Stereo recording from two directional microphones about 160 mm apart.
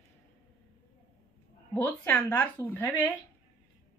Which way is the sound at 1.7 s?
10° left (ahead or behind).